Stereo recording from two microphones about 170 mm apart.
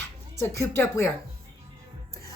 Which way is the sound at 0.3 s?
15° left (ahead or behind).